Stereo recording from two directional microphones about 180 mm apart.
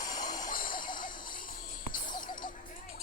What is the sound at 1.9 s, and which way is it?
Music, 50° left (ahead or behind).